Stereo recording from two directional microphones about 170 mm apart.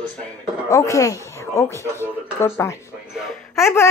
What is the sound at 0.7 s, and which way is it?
Speech, 20° left (ahead or behind).